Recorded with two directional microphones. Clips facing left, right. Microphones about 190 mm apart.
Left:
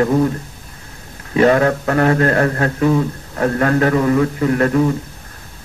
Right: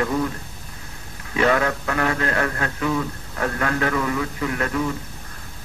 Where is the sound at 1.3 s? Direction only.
35° left (ahead or behind).